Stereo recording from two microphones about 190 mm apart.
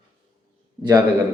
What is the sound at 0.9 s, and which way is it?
Speech, 15° right (ahead or behind).